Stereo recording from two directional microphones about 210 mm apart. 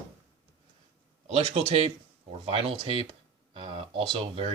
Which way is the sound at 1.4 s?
35° right (ahead or behind).